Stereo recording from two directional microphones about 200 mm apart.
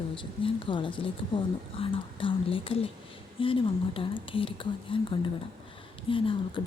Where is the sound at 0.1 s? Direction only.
25° left (ahead or behind).